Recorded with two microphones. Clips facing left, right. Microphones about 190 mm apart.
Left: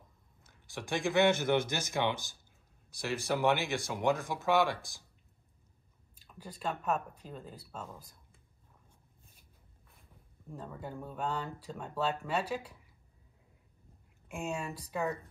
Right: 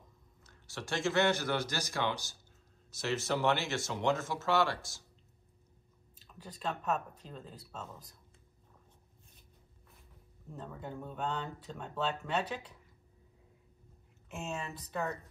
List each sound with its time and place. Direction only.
0.7 s speech: 15° left (ahead or behind)
6.2 s speech: 5° left (ahead or behind)
10.7 s speech: 5° left (ahead or behind)
14.3 s speech: 10° left (ahead or behind)